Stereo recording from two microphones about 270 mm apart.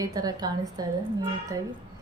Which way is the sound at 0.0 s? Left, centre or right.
Centre.